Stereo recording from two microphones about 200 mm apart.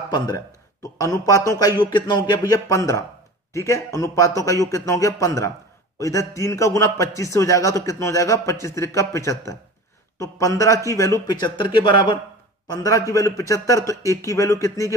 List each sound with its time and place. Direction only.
0.9 s a man's voice: 15° left (ahead or behind)